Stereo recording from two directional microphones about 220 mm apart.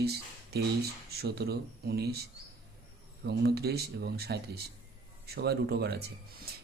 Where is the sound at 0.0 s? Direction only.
45° right (ahead or behind).